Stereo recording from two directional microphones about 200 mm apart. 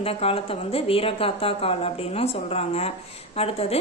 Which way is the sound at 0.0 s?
30° left (ahead or behind).